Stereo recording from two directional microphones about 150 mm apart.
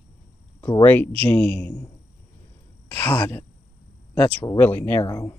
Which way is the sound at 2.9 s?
15° left (ahead or behind).